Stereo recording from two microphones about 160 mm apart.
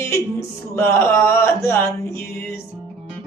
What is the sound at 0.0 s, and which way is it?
Music, 15° left (ahead or behind).